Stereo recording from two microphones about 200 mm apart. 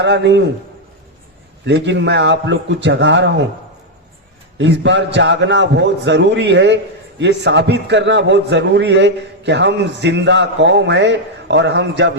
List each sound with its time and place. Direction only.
0.0 s a man's voice: 60° right (ahead or behind)
1.6 s a man's voice: 60° right (ahead or behind)
4.5 s a man's voice: 65° right (ahead or behind)